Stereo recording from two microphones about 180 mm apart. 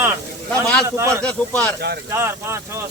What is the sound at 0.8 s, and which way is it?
Speech, 15° right (ahead or behind).